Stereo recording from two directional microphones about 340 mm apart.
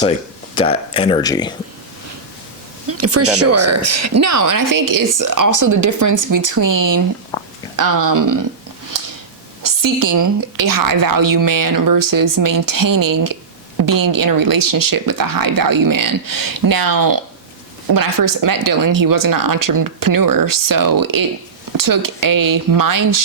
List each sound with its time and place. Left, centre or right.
0.5 s speech: centre
3.0 s a woman's voice: right
7.3 s a sound: centre
7.8 s a woman's voice: right
8.9 s a sound: right
9.6 s a woman's voice: right